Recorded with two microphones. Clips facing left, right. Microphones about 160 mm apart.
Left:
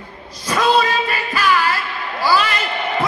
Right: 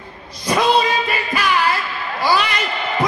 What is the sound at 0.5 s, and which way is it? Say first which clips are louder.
Music: even; 15° right (ahead or behind).